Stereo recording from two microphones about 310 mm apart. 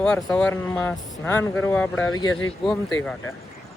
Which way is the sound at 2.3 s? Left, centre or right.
Left.